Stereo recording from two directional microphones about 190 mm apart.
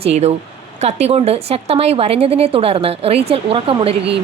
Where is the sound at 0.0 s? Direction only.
35° right (ahead or behind).